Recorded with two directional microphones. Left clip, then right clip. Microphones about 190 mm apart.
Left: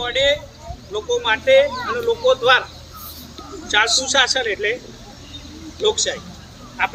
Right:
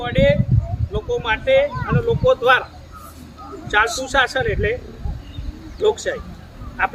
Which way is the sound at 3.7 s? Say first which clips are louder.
Left 1 dB; 55° right (ahead or behind).